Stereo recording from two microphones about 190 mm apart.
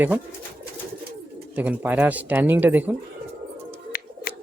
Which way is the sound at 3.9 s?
50° left (ahead or behind).